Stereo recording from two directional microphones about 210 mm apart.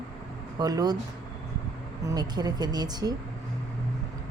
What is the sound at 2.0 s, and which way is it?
Speech, 20° right (ahead or behind).